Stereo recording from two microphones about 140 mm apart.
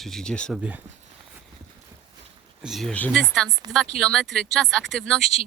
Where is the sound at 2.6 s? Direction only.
Centre (ahead or behind).